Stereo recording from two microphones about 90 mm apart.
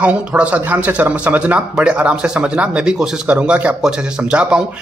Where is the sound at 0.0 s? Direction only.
15° right (ahead or behind).